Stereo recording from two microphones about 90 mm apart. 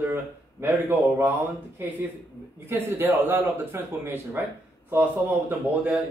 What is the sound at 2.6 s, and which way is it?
A man's voice, 25° right (ahead or behind).